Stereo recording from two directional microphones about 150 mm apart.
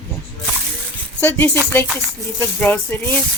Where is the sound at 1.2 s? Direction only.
15° left (ahead or behind).